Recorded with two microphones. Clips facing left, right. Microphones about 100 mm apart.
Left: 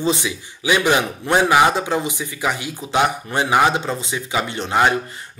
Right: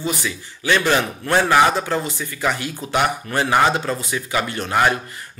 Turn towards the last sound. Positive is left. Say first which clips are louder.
# left 1 dB
turn(degrees=20)  # may be behind; listen again after turning